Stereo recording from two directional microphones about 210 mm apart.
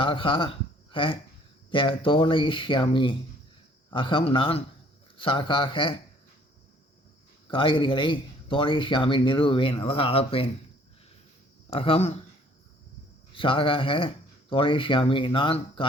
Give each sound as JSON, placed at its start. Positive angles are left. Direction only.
{"t": 0.0, "sound": "speech", "side_deg": 25}
{"t": 7.5, "sound": "speech", "side_deg": 25}
{"t": 11.7, "sound": "speech", "side_deg": 25}
{"t": 13.3, "sound": "speech", "side_deg": 25}